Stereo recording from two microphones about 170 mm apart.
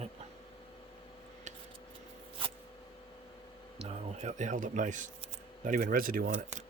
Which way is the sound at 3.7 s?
35° right (ahead or behind).